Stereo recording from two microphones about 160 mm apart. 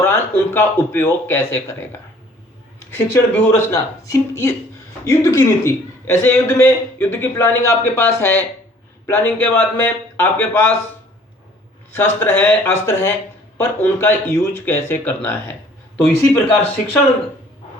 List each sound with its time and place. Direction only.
0.0 s a man's voice: 15° left (ahead or behind)
11.9 s a man's voice: 15° left (ahead or behind)
16.8 s speech: 55° left (ahead or behind)